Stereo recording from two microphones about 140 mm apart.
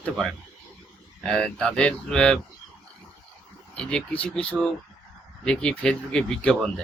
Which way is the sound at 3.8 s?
5° left (ahead or behind).